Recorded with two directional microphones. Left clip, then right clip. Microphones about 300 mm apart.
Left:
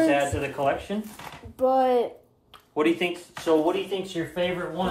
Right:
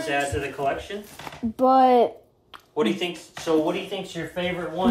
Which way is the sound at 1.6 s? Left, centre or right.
Right.